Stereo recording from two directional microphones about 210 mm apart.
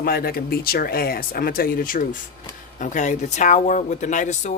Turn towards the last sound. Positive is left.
turn(degrees=35)  # may be behind; listen again after turning